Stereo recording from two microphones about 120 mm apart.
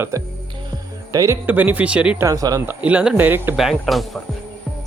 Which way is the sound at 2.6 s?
10° right (ahead or behind).